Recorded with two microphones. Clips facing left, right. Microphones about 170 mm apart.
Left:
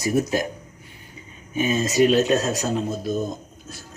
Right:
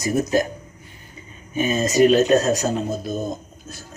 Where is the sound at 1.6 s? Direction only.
45° right (ahead or behind).